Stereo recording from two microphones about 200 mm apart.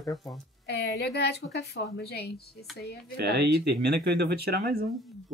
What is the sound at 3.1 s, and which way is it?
Speech, 55° right (ahead or behind).